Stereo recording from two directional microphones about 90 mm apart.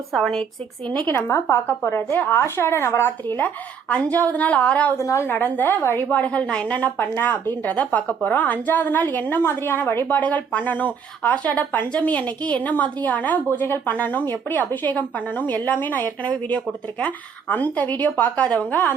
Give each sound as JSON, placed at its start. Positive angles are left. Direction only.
{"t": 0.1, "sound": "speech", "side_deg": 5}
{"t": 1.0, "sound": "speech", "side_deg": 25}
{"t": 4.9, "sound": "a woman's voice", "side_deg": 30}
{"t": 5.4, "sound": "a woman's voice", "side_deg": 20}